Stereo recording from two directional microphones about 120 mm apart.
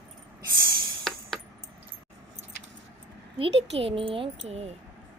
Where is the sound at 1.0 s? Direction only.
Centre (ahead or behind).